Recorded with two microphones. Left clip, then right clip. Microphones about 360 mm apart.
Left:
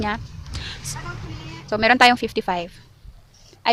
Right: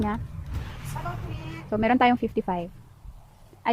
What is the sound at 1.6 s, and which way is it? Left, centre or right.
A woman's voice, left.